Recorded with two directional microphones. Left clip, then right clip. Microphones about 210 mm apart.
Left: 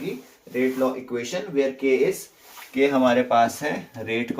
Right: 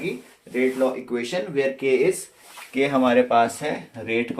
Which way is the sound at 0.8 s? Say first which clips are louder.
Right 1 dB; 55° right (ahead or behind).